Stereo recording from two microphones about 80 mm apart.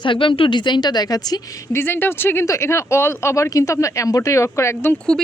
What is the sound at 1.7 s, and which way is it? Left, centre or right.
Speech, left.